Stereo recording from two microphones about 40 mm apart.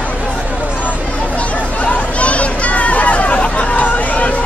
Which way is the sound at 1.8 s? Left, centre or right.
Left.